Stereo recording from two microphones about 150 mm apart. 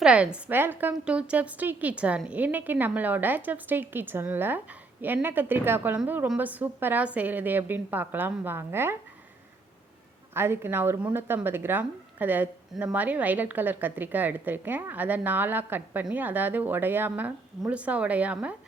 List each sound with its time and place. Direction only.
0.0 s a woman's voice: 5° right (ahead or behind)
10.3 s a woman's voice: 15° right (ahead or behind)